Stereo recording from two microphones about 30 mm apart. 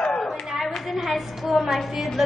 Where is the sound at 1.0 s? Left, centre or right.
Centre.